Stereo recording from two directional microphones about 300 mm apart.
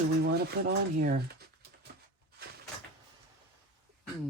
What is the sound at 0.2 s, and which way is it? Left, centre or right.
Speech, right.